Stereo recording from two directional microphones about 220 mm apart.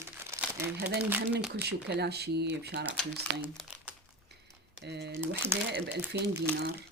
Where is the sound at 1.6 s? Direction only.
50° right (ahead or behind).